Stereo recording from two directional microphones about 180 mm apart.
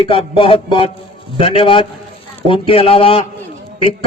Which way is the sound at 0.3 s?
30° left (ahead or behind).